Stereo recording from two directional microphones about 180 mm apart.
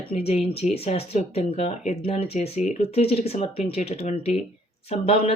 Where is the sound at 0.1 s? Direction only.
35° left (ahead or behind).